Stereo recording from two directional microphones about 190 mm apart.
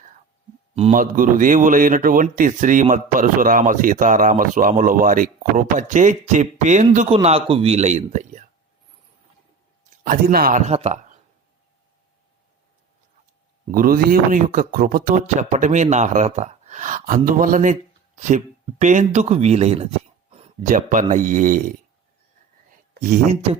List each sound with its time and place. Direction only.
0.8 s a man's voice: 40° right (ahead or behind)
8.1 s a sound: 40° right (ahead or behind)
10.0 s a man's voice: 50° right (ahead or behind)
10.7 s speech: 35° right (ahead or behind)
13.7 s a man's voice: 50° right (ahead or behind)
23.0 s speech: 40° right (ahead or behind)